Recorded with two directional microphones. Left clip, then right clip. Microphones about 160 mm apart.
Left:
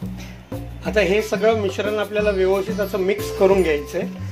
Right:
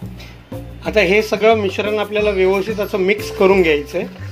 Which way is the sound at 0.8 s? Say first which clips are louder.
Right 4 dB; 20° right (ahead or behind).